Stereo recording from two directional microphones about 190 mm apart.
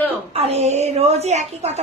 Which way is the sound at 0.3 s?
35° right (ahead or behind).